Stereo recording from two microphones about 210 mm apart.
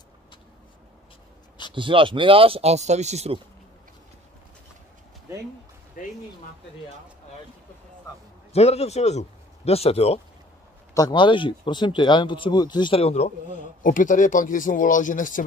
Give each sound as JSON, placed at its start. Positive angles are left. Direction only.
{"t": 1.7, "sound": "speech", "side_deg": -25}
{"t": 6.0, "sound": "a man's voice", "side_deg": 40}
{"t": 8.5, "sound": "a man's voice", "side_deg": 30}